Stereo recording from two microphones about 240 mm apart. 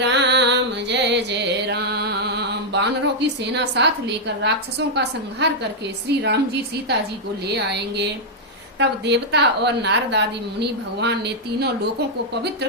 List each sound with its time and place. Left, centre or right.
0.0 s music: right
5.4 s a woman's voice: right